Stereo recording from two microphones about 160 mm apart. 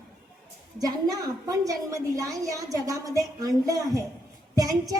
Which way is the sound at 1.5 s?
20° right (ahead or behind).